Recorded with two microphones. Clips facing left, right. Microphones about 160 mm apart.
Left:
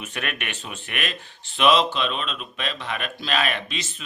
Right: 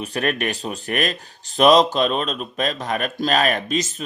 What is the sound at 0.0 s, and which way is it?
Speech, 35° right (ahead or behind).